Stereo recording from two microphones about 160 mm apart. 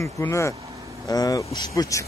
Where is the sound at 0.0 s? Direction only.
20° left (ahead or behind).